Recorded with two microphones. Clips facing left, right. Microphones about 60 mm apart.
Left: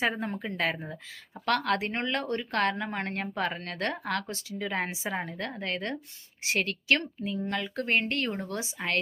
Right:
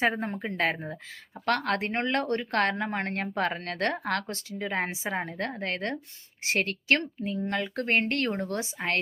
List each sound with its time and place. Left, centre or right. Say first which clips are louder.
0.0 s speech: right 2 dB; right